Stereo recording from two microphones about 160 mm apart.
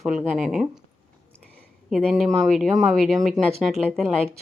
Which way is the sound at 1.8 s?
Centre (ahead or behind).